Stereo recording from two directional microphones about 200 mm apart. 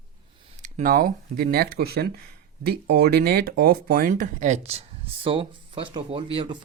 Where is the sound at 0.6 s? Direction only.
45° right (ahead or behind).